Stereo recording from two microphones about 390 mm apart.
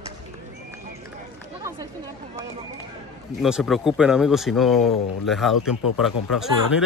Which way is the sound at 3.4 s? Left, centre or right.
Centre.